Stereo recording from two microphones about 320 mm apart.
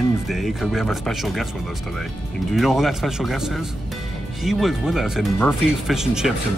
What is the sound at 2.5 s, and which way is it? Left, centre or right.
Speech, centre.